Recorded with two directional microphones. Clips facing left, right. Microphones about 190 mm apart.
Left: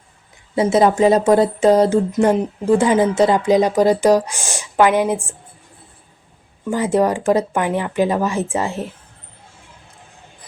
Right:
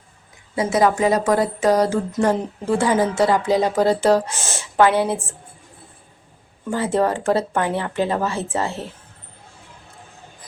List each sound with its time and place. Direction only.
0.5 s speech: 25° left (ahead or behind)
6.7 s speech: 15° left (ahead or behind)